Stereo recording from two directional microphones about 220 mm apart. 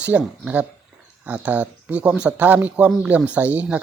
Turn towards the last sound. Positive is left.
turn(degrees=-5)  # may be behind; listen again after turning